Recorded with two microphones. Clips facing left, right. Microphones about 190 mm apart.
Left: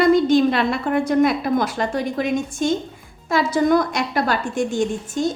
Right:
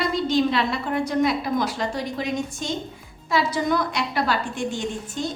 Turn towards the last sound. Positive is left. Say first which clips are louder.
# left 7 dB
turn(degrees=45)  # may be behind; listen again after turning